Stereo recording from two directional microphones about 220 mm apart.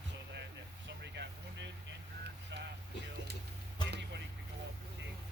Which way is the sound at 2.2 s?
50° right (ahead or behind).